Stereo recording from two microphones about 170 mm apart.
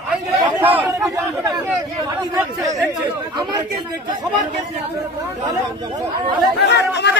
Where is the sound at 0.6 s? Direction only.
10° right (ahead or behind).